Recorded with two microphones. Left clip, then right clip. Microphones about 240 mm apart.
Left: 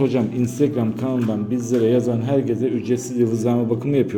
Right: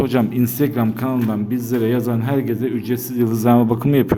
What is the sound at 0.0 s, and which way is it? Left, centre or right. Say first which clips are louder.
A man's voice: right 2 dB; right.